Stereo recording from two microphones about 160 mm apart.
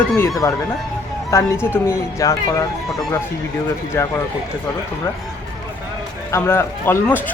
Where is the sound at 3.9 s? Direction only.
15° left (ahead or behind).